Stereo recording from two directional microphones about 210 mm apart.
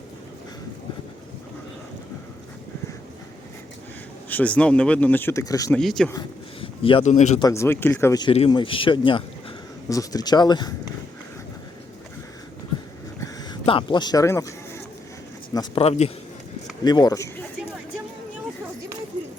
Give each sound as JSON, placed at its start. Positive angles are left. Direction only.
{"t": 4.3, "sound": "speech", "side_deg": 5}
{"t": 5.7, "sound": "speech", "side_deg": 0}
{"t": 6.1, "sound": "a man's voice", "side_deg": 20}
{"t": 7.3, "sound": "speech", "side_deg": 15}
{"t": 8.3, "sound": "speech", "side_deg": 25}
{"t": 13.1, "sound": "a sound", "side_deg": 15}
{"t": 15.5, "sound": "speech", "side_deg": 25}
{"t": 16.8, "sound": "speech", "side_deg": 20}